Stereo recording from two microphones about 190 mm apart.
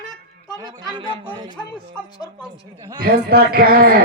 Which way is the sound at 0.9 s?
25° right (ahead or behind).